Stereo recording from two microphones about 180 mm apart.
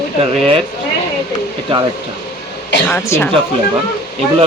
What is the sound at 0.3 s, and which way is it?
Speech, 30° right (ahead or behind).